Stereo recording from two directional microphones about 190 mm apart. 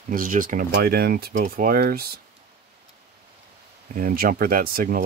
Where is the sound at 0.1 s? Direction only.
45° right (ahead or behind).